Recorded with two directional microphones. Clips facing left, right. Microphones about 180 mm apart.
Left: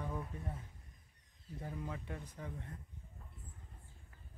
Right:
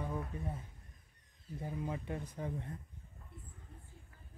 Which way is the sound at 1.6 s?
20° right (ahead or behind).